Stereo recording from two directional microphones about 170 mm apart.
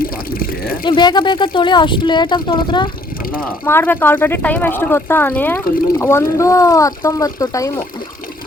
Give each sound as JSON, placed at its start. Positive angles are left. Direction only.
{"t": 0.0, "sound": "speech", "side_deg": 60}
{"t": 0.9, "sound": "speech", "side_deg": 25}
{"t": 3.7, "sound": "speech", "side_deg": 15}